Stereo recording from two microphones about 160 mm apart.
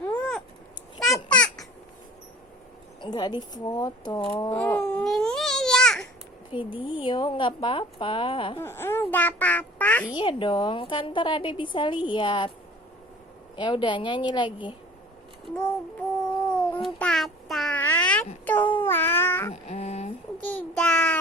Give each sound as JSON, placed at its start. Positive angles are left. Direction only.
{"t": 0.0, "sound": "cat", "side_deg": 10}
{"t": 1.3, "sound": "babbling", "side_deg": 5}
{"t": 3.0, "sound": "speech", "side_deg": 25}
{"t": 4.9, "sound": "baby cry", "side_deg": 5}
{"t": 6.5, "sound": "a woman's voice", "side_deg": 30}
{"t": 8.5, "sound": "a child's voice", "side_deg": 15}
{"t": 10.2, "sound": "a woman's voice", "side_deg": 30}
{"t": 13.6, "sound": "speech", "side_deg": 30}
{"t": 15.4, "sound": "child singing", "side_deg": 5}
{"t": 16.6, "sound": "babbling", "side_deg": 10}
{"t": 19.6, "sound": "a sound", "side_deg": 45}
{"t": 20.4, "sound": "child singing", "side_deg": 10}